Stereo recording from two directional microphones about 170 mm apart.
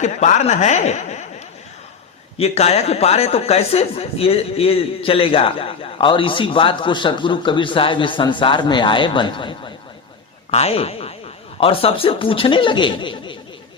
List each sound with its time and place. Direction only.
0.0 s speech: 40° left (ahead or behind)
2.4 s a man's voice: 40° left (ahead or behind)